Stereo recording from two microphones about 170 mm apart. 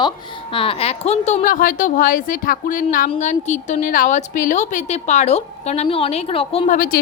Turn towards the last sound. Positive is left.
turn(degrees=50)  # may be behind; listen again after turning